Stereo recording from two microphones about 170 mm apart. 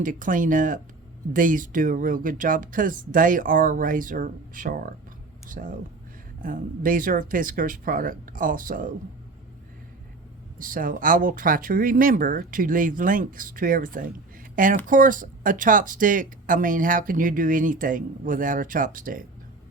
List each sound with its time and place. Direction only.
0.0 s speech: 50° right (ahead or behind)
10.6 s speech: 55° right (ahead or behind)